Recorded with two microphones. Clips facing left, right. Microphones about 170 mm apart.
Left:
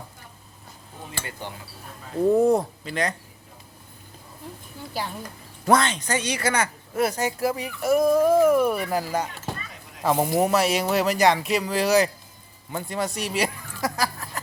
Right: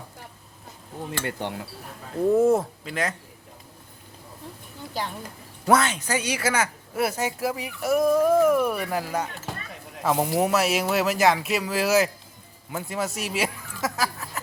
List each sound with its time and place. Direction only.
1.2 s speech: 65° right (ahead or behind)
2.3 s speech: centre (ahead or behind)
5.6 s speech: 5° right (ahead or behind)